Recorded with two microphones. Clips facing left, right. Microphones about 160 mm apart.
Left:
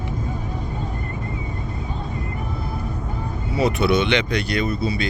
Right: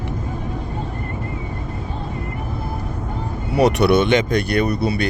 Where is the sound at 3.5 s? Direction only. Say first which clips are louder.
Right 4 dB; 70° right (ahead or behind).